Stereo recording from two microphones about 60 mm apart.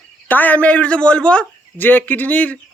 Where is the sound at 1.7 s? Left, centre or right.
Left.